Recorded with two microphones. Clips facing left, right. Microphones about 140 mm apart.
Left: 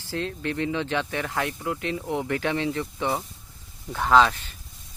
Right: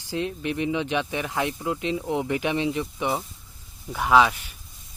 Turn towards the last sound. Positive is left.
turn(degrees=-10)  # may be behind; listen again after turning